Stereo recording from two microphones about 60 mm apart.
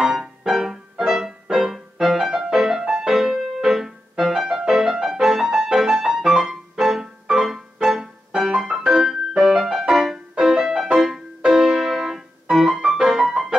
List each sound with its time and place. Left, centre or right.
0.0 s music: centre